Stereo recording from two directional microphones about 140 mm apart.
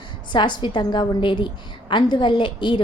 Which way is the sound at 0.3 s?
35° left (ahead or behind).